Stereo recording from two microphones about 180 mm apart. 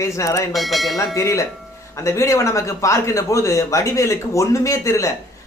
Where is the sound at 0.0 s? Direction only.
15° left (ahead or behind).